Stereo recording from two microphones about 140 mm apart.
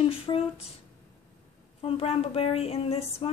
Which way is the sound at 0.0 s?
45° left (ahead or behind).